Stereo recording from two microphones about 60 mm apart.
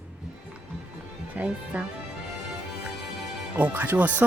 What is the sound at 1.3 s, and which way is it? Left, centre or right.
Speech, right.